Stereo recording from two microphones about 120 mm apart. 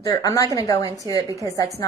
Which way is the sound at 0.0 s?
30° left (ahead or behind).